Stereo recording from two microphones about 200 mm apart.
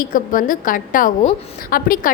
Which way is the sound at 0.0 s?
45° left (ahead or behind).